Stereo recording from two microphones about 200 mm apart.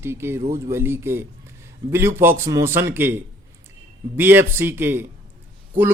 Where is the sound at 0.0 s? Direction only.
10° right (ahead or behind).